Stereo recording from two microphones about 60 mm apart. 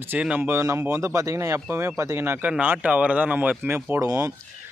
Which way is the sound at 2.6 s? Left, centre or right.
Right.